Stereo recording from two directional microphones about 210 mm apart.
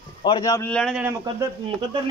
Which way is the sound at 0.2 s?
20° left (ahead or behind).